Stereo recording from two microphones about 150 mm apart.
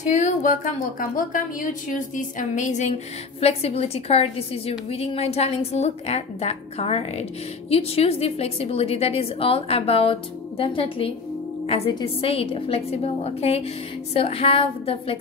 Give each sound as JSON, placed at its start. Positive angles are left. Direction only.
{"t": 0.1, "sound": "a woman's voice", "side_deg": 55}
{"t": 0.9, "sound": "a woman's voice", "side_deg": 65}